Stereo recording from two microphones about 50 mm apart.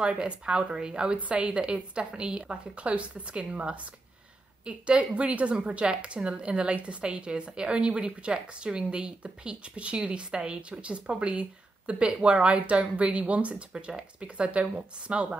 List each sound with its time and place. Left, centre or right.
0.0 s a woman's voice: right